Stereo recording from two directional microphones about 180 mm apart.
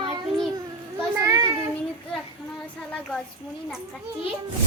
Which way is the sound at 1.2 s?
20° right (ahead or behind).